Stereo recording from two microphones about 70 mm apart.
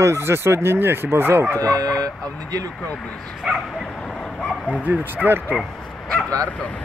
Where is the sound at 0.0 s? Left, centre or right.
Right.